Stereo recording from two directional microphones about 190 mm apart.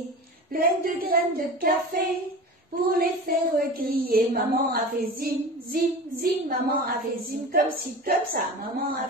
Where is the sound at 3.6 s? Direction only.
50° right (ahead or behind).